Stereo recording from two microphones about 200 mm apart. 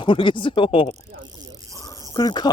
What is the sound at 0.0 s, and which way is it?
Speech, 25° left (ahead or behind).